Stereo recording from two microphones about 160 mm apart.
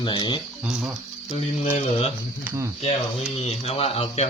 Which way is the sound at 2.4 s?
20° right (ahead or behind).